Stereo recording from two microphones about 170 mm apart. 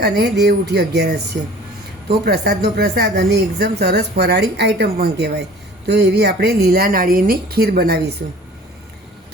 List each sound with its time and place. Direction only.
0.0 s speech: 70° right (ahead or behind)